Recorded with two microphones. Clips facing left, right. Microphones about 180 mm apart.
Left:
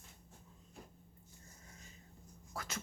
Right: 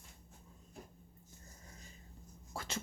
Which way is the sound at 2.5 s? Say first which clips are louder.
Right 1 dB; 30° right (ahead or behind).